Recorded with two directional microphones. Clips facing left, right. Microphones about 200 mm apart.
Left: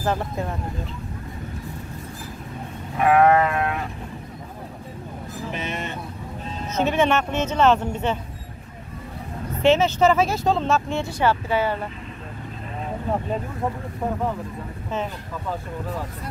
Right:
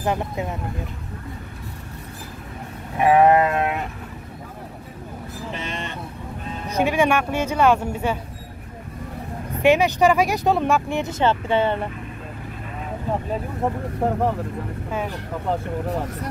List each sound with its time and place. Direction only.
0.0 s speech: 15° right (ahead or behind)
3.0 s sheep: 15° right (ahead or behind)
5.5 s speech: 10° left (ahead or behind)
6.7 s speech: 10° right (ahead or behind)
9.6 s speech: 15° right (ahead or behind)